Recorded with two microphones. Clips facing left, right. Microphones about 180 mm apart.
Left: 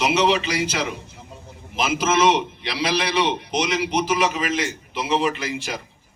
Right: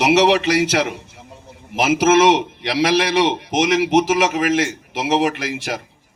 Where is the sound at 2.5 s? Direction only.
85° right.